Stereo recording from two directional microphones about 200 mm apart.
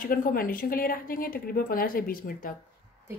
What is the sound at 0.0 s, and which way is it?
A woman's voice, 45° left (ahead or behind).